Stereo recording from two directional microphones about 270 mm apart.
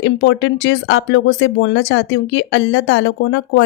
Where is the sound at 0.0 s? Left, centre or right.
Left.